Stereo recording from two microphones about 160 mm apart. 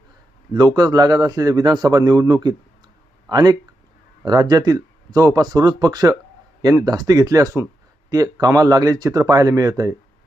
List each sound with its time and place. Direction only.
0.5 s a man's voice: 25° right (ahead or behind)